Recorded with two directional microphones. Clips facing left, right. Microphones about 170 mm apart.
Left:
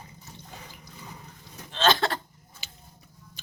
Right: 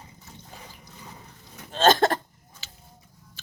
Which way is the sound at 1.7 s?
45° right (ahead or behind).